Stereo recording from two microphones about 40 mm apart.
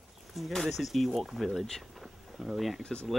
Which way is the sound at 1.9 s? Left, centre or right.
Centre.